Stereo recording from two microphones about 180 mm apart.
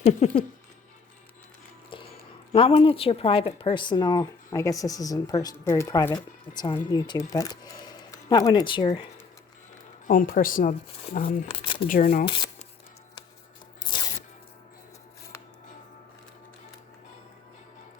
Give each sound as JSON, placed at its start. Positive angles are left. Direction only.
{"t": 0.0, "sound": "a sound", "side_deg": 35}
{"t": 1.9, "sound": "music", "side_deg": 30}
{"t": 2.5, "sound": "speech", "side_deg": 30}
{"t": 10.1, "sound": "speech", "side_deg": 50}
{"t": 11.4, "sound": "speech", "side_deg": 30}
{"t": 15.3, "sound": "music", "side_deg": 15}